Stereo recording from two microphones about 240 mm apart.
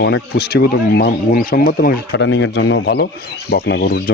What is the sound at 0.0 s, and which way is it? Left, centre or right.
Speech, left.